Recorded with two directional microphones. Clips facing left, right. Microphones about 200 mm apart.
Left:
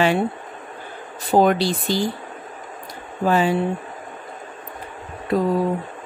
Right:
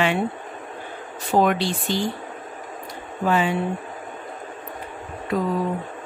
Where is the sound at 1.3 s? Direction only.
35° left (ahead or behind).